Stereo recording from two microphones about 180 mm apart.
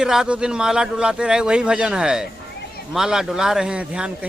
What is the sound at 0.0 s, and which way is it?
A man's voice, 5° right (ahead or behind).